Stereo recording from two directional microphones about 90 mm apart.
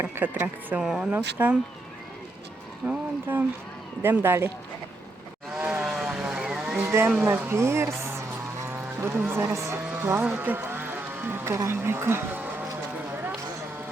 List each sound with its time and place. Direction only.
0.0 s speech: 20° right (ahead or behind)
0.8 s speech: 5° right (ahead or behind)
1.1 s speech: 20° right (ahead or behind)
2.8 s speech: 20° right (ahead or behind)
4.0 s speech: 25° right (ahead or behind)
5.5 s vehicle: 15° right (ahead or behind)
5.9 s vehicle: centre (ahead or behind)
6.8 s a woman's voice: 30° right (ahead or behind)
10.2 s a man's voice: 15° right (ahead or behind)